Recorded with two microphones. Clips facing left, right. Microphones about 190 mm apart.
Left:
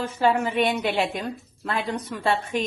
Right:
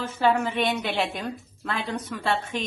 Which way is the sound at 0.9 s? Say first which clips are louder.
Left 3 dB; centre (ahead or behind).